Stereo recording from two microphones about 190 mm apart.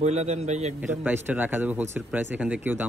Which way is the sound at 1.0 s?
10° right (ahead or behind).